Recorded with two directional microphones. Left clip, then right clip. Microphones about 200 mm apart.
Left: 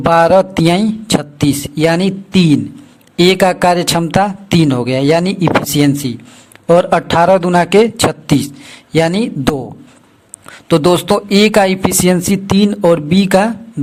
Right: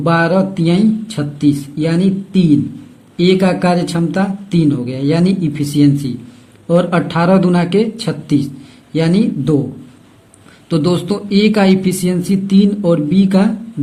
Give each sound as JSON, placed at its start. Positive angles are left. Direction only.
{"t": 0.1, "sound": "speech", "side_deg": 40}
{"t": 10.7, "sound": "speech", "side_deg": 35}